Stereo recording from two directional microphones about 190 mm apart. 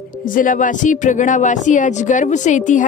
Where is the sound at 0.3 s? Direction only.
45° left (ahead or behind).